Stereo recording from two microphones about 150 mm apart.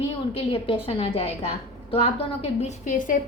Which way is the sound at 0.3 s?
40° left (ahead or behind).